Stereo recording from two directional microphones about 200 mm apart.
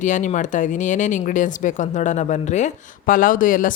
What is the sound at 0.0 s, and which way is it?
Speech, 40° left (ahead or behind).